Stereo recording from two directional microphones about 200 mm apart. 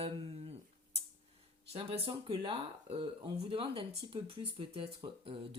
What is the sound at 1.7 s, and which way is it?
Speech, 25° right (ahead or behind).